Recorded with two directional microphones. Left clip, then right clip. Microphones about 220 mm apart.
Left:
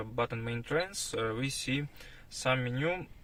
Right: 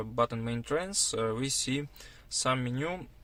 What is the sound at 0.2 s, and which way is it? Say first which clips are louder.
Speech: right 4 dB; 55° right (ahead or behind).